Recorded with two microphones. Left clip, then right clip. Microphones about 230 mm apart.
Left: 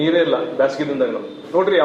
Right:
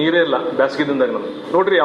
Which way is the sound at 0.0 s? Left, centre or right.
Right.